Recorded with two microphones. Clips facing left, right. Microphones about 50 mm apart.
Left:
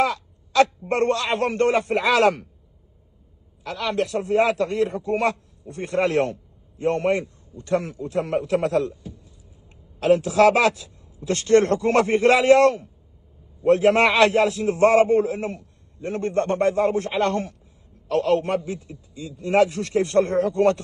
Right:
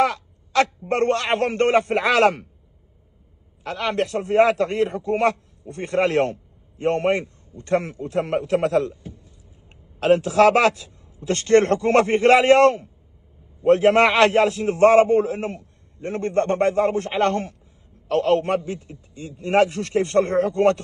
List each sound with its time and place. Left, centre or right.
0.0 s a man's voice: right
3.6 s a man's voice: right